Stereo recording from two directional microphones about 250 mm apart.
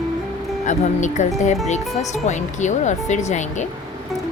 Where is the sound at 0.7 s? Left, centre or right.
Left.